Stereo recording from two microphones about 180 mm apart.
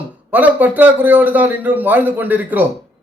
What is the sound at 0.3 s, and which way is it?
A man's voice, 10° right (ahead or behind).